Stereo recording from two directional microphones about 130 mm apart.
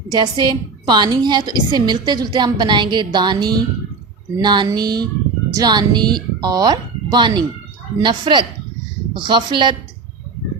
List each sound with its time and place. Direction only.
0.1 s a woman's voice: 35° right (ahead or behind)